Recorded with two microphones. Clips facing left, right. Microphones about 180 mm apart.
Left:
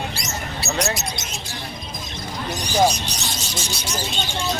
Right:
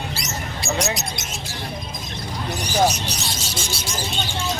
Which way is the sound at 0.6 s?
Centre (ahead or behind).